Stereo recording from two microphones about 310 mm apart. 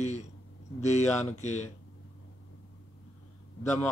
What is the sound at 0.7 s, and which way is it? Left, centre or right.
Speech, left.